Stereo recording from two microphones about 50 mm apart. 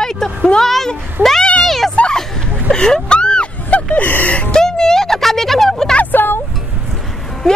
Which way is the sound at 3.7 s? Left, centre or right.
Left.